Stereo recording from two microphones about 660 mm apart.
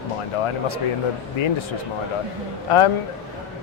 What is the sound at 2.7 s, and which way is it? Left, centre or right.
Speech, left.